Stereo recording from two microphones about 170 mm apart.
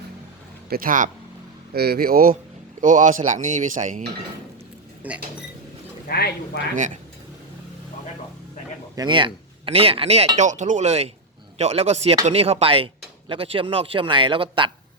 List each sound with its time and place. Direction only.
0.7 s speech: 55° right (ahead or behind)
1.7 s speech: 70° right (ahead or behind); by 4.0 s 50° right (ahead or behind)
5.0 s speech: 10° right (ahead or behind)
6.1 s speech: 65° left (ahead or behind)
6.7 s speech: 45° right (ahead or behind)
9.0 s speech: 30° right (ahead or behind)